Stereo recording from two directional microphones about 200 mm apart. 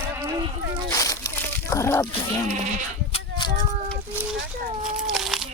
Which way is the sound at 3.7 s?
35° right (ahead or behind).